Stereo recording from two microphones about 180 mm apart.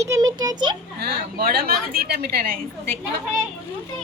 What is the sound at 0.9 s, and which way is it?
A woman's voice, 60° right (ahead or behind).